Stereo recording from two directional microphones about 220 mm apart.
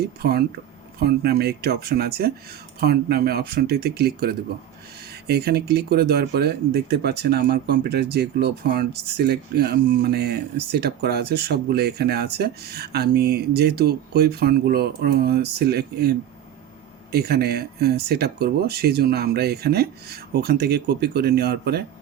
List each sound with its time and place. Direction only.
0.2 s speech: 45° right (ahead or behind)